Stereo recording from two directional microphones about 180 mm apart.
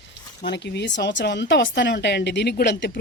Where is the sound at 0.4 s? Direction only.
70° left (ahead or behind).